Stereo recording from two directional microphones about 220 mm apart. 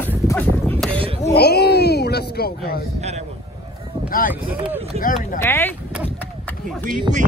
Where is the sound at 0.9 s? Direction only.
25° right (ahead or behind).